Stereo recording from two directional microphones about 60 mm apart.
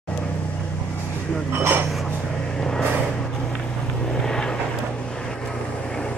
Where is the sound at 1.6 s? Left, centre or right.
Right.